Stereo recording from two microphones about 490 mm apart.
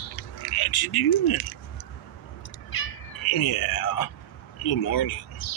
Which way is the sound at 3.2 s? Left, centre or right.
Left.